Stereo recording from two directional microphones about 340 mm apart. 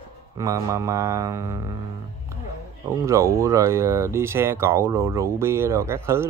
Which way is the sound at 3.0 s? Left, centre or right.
Centre.